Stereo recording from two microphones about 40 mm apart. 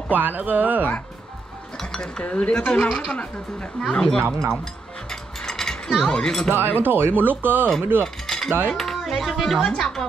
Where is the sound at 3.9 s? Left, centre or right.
Centre.